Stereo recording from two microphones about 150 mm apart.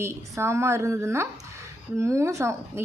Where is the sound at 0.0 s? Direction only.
20° right (ahead or behind).